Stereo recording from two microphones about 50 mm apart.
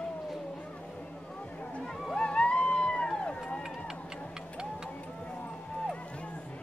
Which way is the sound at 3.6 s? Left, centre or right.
Centre.